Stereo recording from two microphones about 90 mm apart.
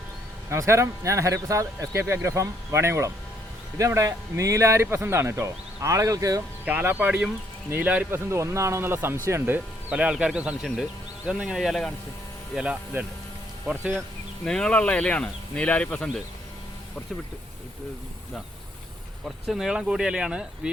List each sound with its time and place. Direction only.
0.5 s speech: 30° right (ahead or behind)
6.7 s speech: 20° right (ahead or behind)
8.3 s speech: 30° right (ahead or behind)
9.9 s speech: 15° right (ahead or behind); by 11.9 s 5° left (ahead or behind)
14.4 s speech: 10° left (ahead or behind)
19.5 s speech: 5° right (ahead or behind)